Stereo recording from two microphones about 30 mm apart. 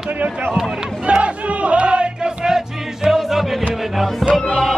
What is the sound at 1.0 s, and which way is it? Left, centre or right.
Music, right.